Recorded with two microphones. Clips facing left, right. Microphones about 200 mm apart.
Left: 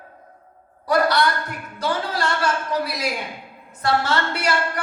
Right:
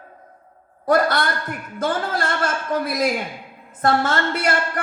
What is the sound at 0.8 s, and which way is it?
Speech, 50° right (ahead or behind).